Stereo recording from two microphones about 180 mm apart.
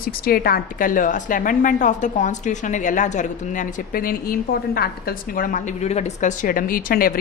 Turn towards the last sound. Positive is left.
turn(degrees=55)  # may be behind; listen again after turning